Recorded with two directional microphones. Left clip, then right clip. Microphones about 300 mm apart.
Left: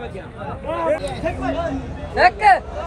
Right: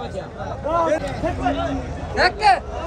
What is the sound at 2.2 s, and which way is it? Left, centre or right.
Speech, left.